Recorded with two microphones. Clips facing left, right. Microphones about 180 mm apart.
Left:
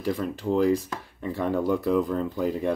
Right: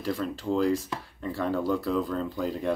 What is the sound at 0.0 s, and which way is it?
Speech, 15° left (ahead or behind).